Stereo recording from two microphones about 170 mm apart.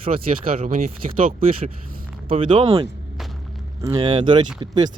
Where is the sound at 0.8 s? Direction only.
55° right (ahead or behind).